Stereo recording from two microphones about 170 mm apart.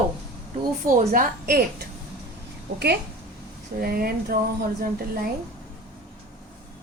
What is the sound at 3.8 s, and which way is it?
Speech, 60° right (ahead or behind).